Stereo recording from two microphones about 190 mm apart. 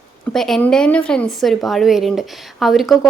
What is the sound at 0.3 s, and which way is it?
A woman's voice, centre (ahead or behind).